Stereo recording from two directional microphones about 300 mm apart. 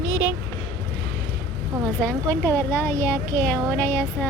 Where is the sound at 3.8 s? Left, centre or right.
Centre.